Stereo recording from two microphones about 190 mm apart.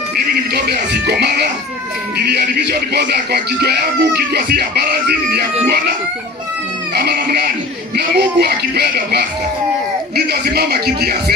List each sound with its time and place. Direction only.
0.7 s speech: 60° right (ahead or behind)
7.0 s speech: 55° right (ahead or behind)